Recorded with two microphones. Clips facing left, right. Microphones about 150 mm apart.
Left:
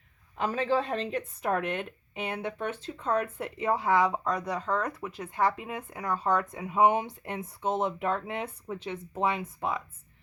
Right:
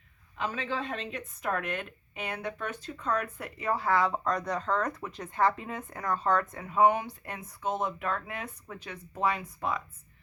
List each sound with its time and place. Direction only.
0.3 s speech: 40° left (ahead or behind); by 9.8 s 25° left (ahead or behind)